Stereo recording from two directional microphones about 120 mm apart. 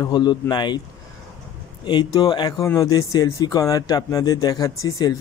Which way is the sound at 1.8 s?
35° left (ahead or behind).